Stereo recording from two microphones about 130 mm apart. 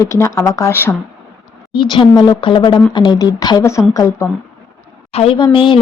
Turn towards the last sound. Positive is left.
turn(degrees=40)  # may be behind; listen again after turning